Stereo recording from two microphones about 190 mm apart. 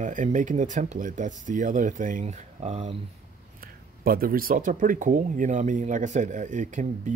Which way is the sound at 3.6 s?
50° right (ahead or behind).